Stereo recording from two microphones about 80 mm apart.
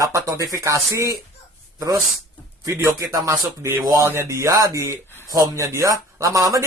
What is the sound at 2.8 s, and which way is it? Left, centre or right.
Speech, right.